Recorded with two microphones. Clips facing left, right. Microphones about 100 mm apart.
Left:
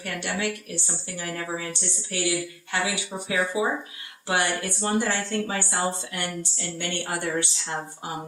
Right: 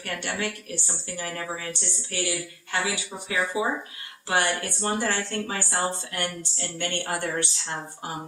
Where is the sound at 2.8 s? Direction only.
20° left (ahead or behind).